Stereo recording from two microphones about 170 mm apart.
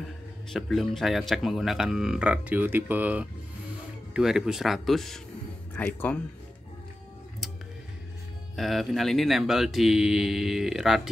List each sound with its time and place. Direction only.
0.5 s speech: centre (ahead or behind)
8.5 s speech: centre (ahead or behind)